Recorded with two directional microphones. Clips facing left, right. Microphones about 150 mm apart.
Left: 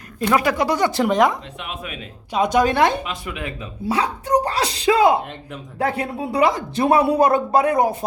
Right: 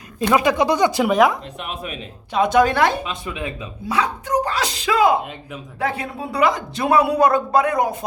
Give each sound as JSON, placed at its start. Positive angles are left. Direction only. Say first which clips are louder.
{"t": 0.2, "sound": "speech", "louder": "right 2 dB", "side_deg": -20}
{"t": 1.5, "sound": "speech", "louder": "right 2 dB", "side_deg": -40}
{"t": 2.3, "sound": "a woman's voice", "louder": "right 1 dB", "side_deg": 15}
{"t": 3.0, "sound": "speech", "louder": "right 1 dB", "side_deg": -25}
{"t": 3.8, "sound": "speech", "louder": "left 1 dB", "side_deg": 30}